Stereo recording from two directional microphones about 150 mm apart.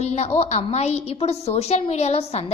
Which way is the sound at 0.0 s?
45° left (ahead or behind).